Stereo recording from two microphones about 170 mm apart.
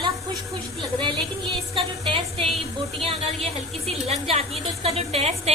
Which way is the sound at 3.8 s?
40° right (ahead or behind).